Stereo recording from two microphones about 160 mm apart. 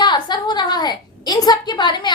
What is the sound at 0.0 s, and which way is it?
A woman's voice, 25° left (ahead or behind).